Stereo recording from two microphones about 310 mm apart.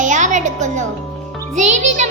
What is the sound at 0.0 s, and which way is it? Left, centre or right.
Music, right.